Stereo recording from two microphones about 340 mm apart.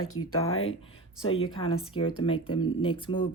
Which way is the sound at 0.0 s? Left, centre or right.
Left.